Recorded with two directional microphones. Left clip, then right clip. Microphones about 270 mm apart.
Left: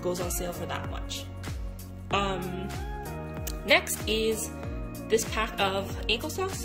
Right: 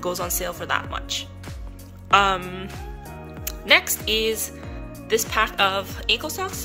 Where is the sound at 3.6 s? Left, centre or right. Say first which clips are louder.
Right 6 dB; centre.